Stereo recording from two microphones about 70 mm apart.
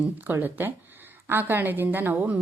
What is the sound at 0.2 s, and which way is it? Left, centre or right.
A woman's voice, right.